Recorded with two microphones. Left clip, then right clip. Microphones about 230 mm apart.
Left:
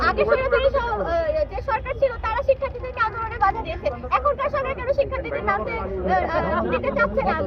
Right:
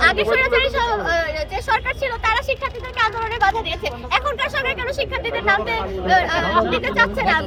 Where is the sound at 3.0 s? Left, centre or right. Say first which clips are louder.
Right 4 dB; centre.